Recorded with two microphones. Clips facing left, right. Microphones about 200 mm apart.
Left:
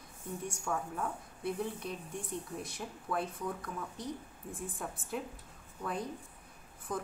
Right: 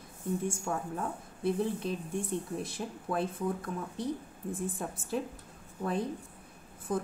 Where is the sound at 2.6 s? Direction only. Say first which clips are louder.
Right 5 dB; 25° right (ahead or behind).